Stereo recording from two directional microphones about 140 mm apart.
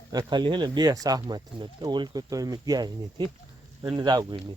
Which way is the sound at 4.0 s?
30° right (ahead or behind).